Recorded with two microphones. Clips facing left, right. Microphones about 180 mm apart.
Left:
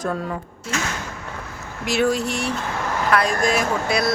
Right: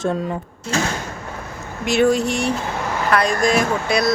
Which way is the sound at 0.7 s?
30° right (ahead or behind).